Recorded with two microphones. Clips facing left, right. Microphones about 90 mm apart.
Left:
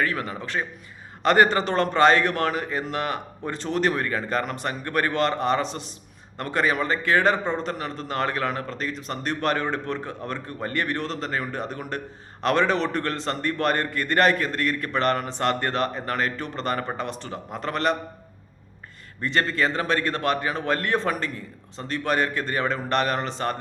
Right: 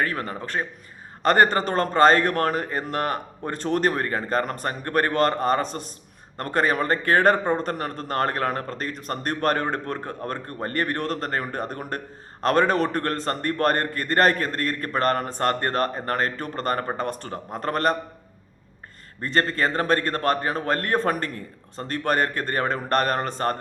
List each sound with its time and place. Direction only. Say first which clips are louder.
0.0 s a man's voice: even; 40° right (ahead or behind)
0.6 s a man's voice: even; 30° right (ahead or behind)
1.2 s a man's voice: even; 40° right (ahead or behind)
19.2 s a man's voice: right 1 dB; 40° right (ahead or behind)